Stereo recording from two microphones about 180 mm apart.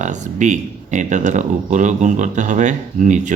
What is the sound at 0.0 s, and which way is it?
Speech, 40° right (ahead or behind).